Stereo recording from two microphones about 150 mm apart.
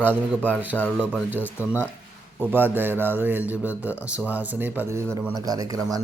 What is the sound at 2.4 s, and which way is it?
Speech, 15° right (ahead or behind).